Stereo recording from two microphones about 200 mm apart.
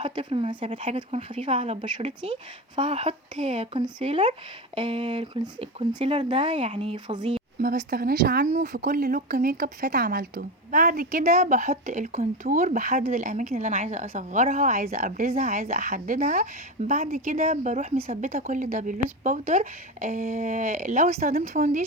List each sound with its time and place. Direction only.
0.0 s speech: 25° right (ahead or behind)
7.6 s speech: 45° right (ahead or behind)